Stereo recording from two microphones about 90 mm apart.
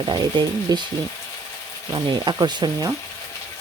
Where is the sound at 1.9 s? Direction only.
55° right (ahead or behind).